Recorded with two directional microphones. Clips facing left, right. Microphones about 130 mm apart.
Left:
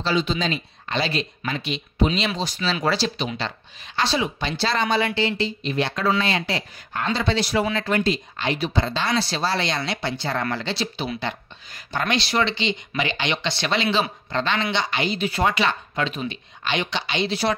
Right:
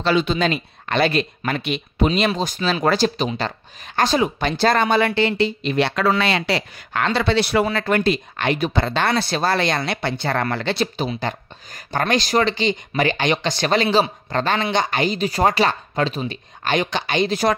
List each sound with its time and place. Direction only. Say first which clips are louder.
0.0 s speech: right 4 dB; 60° right (ahead or behind)